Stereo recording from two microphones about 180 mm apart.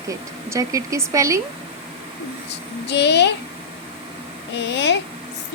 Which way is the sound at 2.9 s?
70° left (ahead or behind).